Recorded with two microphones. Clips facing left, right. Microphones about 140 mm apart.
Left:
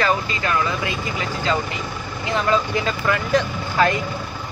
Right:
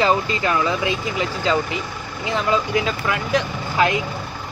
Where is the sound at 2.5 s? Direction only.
5° right (ahead or behind).